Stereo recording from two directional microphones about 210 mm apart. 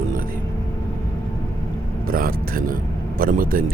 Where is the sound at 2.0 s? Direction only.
45° right (ahead or behind).